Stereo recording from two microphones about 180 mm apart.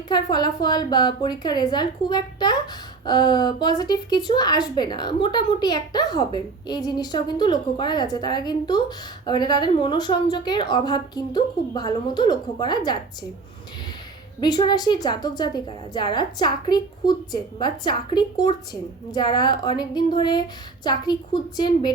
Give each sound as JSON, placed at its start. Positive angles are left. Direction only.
{"t": 0.1, "sound": "a woman's voice", "side_deg": 25}
{"t": 14.4, "sound": "a woman's voice", "side_deg": 25}